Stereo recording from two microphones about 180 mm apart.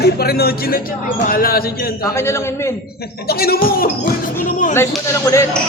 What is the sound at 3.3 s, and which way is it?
Speech, 60° left (ahead or behind).